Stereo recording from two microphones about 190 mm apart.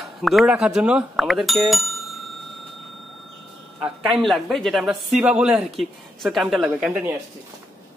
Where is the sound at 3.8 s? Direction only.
Centre (ahead or behind).